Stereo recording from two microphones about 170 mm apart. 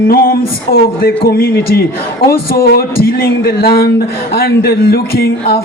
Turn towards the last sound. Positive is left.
turn(degrees=65)  # may be behind; listen again after turning